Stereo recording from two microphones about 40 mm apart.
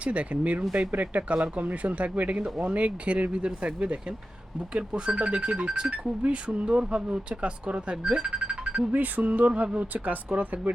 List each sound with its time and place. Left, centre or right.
0.0 s speech: right
8.9 s music: right
9.6 s speech: right